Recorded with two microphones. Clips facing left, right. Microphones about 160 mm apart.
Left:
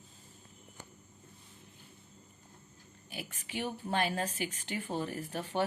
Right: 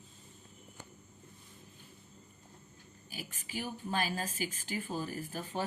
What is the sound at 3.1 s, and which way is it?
A woman's voice, 65° left (ahead or behind).